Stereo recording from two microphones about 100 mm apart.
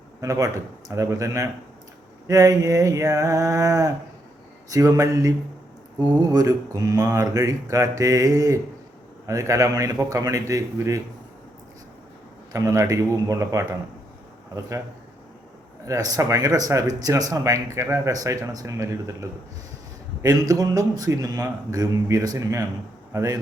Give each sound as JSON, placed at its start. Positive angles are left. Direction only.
{"t": 0.2, "sound": "speech", "side_deg": -35}
{"t": 4.9, "sound": "speech", "side_deg": -30}
{"t": 6.3, "sound": "speech", "side_deg": -35}
{"t": 12.5, "sound": "speech", "side_deg": -35}
{"t": 15.9, "sound": "speech", "side_deg": -35}